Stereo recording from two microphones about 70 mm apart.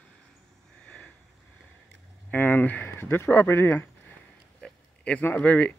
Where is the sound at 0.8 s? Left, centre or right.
Centre.